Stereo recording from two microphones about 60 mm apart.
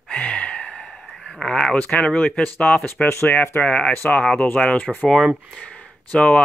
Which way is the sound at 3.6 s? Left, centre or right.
Centre.